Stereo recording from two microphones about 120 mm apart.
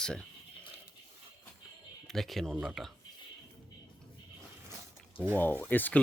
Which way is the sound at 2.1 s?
Centre (ahead or behind).